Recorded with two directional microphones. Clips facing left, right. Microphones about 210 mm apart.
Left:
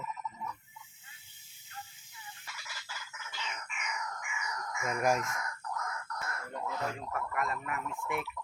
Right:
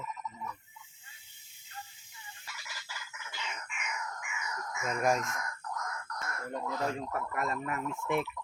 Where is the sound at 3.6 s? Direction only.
5° right (ahead or behind).